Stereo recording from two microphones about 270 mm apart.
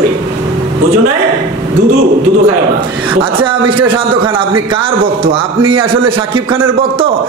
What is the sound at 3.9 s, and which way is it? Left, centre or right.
A man's voice, centre.